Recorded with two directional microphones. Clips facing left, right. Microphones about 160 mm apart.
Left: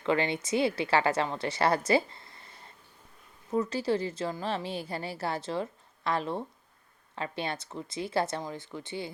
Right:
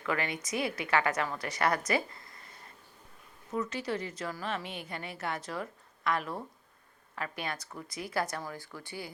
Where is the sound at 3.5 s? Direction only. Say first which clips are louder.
Left 6 dB; 30° left (ahead or behind).